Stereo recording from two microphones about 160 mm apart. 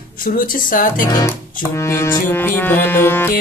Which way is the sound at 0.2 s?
60° left (ahead or behind).